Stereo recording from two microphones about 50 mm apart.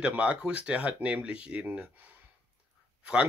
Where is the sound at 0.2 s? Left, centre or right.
Right.